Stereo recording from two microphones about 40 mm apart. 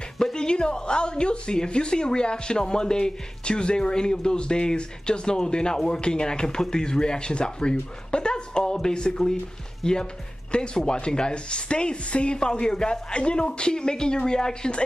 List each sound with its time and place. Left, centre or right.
0.2 s a woman's voice: centre